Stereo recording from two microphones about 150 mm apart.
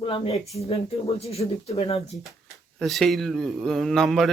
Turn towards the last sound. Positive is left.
turn(degrees=0)  # may be behind; listen again after turning